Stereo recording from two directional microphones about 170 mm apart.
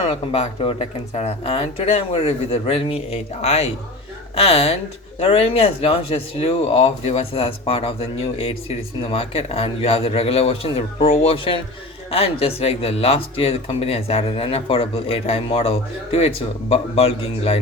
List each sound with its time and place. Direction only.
0.1 s speech: 35° left (ahead or behind)